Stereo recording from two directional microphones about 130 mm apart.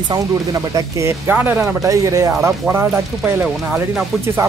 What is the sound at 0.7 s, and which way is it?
Speech, 20° right (ahead or behind).